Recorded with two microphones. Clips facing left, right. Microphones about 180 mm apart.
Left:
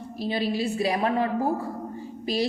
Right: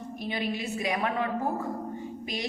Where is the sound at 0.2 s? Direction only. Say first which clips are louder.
Left 6 dB; 30° left (ahead or behind).